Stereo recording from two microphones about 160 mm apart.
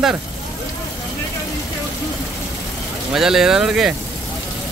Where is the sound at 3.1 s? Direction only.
Centre (ahead or behind).